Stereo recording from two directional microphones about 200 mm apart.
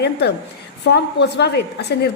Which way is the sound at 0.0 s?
55° left (ahead or behind).